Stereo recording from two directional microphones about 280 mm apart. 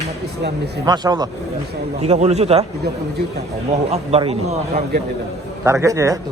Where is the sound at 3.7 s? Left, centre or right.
Right.